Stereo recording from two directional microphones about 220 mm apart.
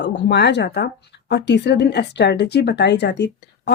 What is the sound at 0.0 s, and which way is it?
Speech, 50° left (ahead or behind).